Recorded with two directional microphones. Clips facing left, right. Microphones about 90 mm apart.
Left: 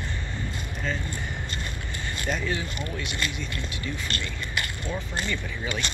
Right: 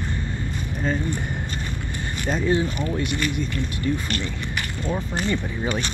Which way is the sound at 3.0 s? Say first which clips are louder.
Right 7 dB; 50° right (ahead or behind).